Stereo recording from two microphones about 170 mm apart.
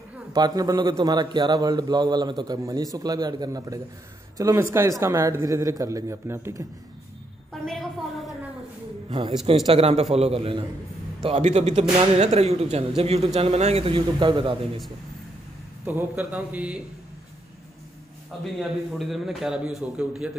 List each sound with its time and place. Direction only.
0.3 s a man's voice: 20° right (ahead or behind)
7.6 s a sound: centre (ahead or behind)
9.7 s a man's voice: 35° right (ahead or behind)
15.8 s a man's voice: 10° right (ahead or behind)
18.4 s a man's voice: centre (ahead or behind)